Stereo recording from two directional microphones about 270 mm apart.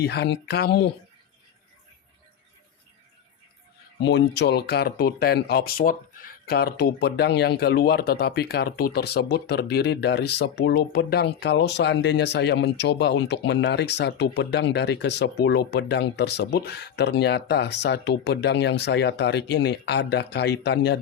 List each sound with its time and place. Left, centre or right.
0.0 s speech: left
4.0 s speech: left